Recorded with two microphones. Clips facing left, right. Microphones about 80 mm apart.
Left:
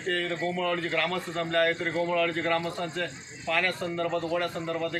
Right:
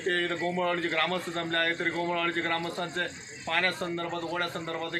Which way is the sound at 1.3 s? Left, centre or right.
Right.